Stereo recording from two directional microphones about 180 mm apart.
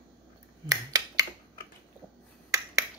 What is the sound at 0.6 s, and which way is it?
Finger snapping, 20° right (ahead or behind).